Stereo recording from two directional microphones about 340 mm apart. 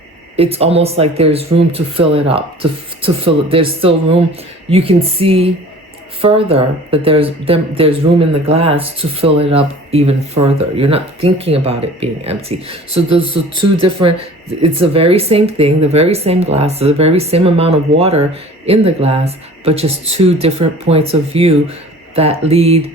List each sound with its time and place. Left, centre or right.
0.3 s speech: centre